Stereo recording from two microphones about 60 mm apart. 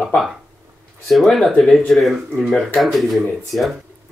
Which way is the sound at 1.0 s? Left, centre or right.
Centre.